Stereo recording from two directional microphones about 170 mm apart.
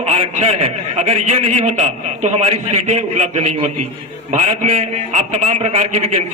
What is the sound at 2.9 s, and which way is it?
A man's voice, 40° right (ahead or behind).